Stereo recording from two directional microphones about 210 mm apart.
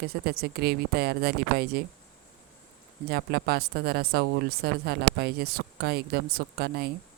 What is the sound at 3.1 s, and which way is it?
Speech, 50° right (ahead or behind).